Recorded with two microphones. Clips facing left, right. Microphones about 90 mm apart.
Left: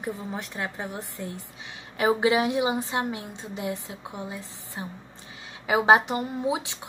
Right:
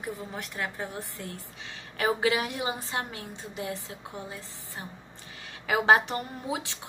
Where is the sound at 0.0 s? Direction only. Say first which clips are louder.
Left 4 dB; 20° left (ahead or behind).